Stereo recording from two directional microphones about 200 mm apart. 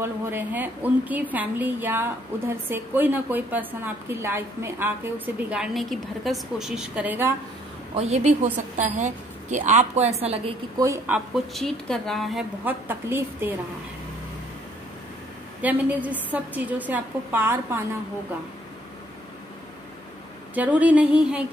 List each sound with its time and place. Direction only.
0.0 s a woman's voice: 10° right (ahead or behind)
7.9 s a woman's voice: 30° right (ahead or behind)
10.8 s a woman's voice: 15° right (ahead or behind)
11.3 s a woman's voice: centre (ahead or behind)
15.6 s a woman's voice: 10° right (ahead or behind)
20.5 s a woman's voice: 5° right (ahead or behind)